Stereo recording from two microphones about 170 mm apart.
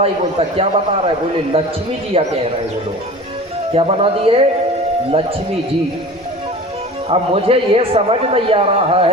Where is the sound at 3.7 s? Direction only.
35° right (ahead or behind).